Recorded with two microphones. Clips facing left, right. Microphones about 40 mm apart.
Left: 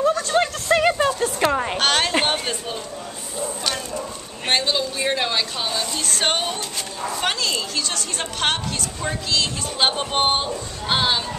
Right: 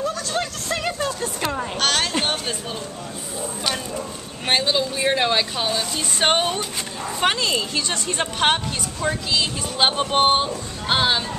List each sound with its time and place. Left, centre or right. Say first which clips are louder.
0.0 s a sound: left 6 dB; centre
1.2 s speech: left 5 dB; centre
1.8 s a woman's voice: even; centre
4.5 s speech: right 1 dB; centre